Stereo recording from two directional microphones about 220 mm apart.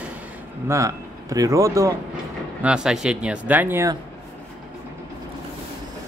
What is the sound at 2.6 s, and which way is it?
Speech, 5° right (ahead or behind).